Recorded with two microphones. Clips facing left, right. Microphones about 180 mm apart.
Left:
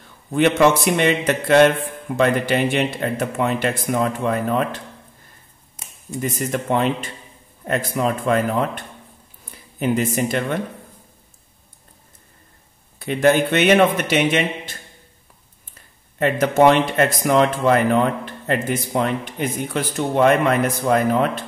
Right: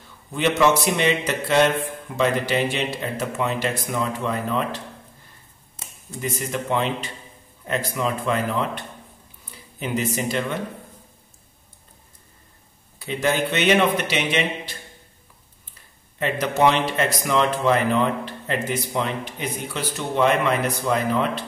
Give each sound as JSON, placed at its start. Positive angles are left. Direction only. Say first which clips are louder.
{"t": 0.3, "sound": "a man's voice", "louder": "left 4 dB", "side_deg": 55}
{"t": 6.3, "sound": "speech", "louder": "left 3 dB", "side_deg": 50}
{"t": 13.0, "sound": "speech", "louder": "left 6 dB", "side_deg": 55}
{"t": 16.2, "sound": "speech", "louder": "left 5 dB", "side_deg": 50}